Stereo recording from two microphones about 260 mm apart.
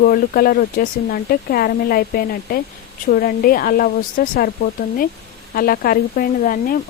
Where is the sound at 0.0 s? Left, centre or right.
Left.